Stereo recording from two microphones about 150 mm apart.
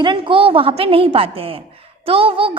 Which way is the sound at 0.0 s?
35° right (ahead or behind).